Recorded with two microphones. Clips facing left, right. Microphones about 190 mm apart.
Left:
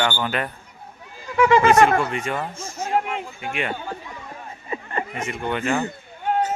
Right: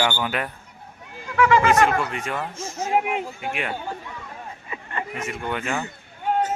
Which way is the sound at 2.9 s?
10° right (ahead or behind).